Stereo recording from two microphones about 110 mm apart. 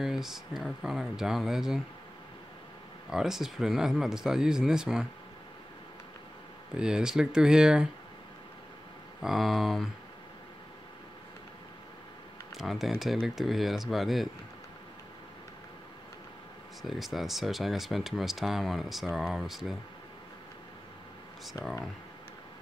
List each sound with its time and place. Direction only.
0.0 s speech: 5° right (ahead or behind)
3.1 s speech: 5° right (ahead or behind)
6.8 s speech: 5° right (ahead or behind)
9.2 s speech: centre (ahead or behind)
12.5 s speech: centre (ahead or behind)
16.8 s speech: centre (ahead or behind)
21.5 s speech: 30° left (ahead or behind)